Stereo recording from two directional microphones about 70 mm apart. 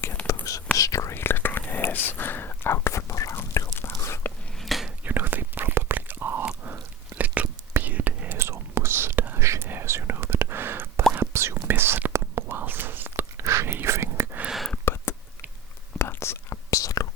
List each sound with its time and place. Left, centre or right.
0.3 s whispering: left
1.1 s whispering: left
4.6 s whispering: centre
5.0 s whispering: right
9.4 s whispering: right
12.1 s whispering: right
12.5 s whispering: right
13.3 s a sound: right
13.7 s whispering: right
14.9 s a sound: left
16.0 s whispering: left